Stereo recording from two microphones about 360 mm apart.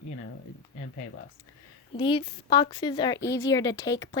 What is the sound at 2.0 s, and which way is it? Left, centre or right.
Speech, centre.